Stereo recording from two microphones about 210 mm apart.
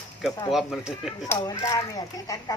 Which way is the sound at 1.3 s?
15° left (ahead or behind).